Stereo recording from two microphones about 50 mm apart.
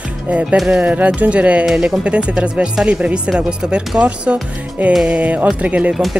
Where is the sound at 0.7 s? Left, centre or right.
Right.